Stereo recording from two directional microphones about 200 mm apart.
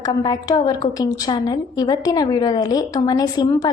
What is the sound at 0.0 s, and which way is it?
A woman's voice, 20° left (ahead or behind).